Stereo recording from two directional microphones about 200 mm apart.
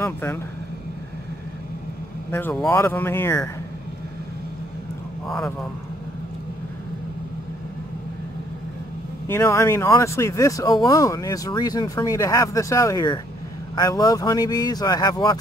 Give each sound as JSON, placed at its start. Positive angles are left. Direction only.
{"t": 0.0, "sound": "speech", "side_deg": 10}
{"t": 2.3, "sound": "speech", "side_deg": 5}
{"t": 5.2, "sound": "speech", "side_deg": 0}
{"t": 9.3, "sound": "speech", "side_deg": 15}